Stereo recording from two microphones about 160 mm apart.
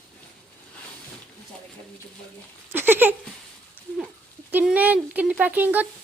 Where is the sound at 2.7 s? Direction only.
15° right (ahead or behind).